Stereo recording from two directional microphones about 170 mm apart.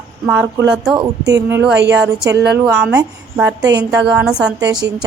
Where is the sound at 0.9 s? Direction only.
20° right (ahead or behind).